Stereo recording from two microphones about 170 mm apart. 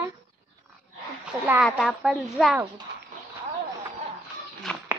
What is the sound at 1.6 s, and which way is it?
Speech, centre (ahead or behind).